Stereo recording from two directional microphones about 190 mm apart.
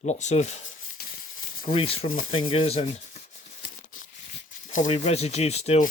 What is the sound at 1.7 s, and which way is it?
Speech, 25° left (ahead or behind).